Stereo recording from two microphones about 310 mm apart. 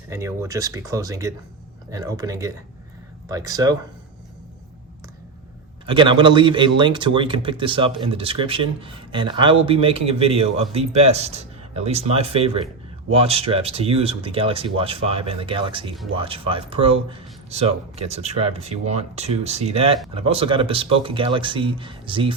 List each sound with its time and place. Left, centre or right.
0.1 s speech: centre
5.8 s speech: centre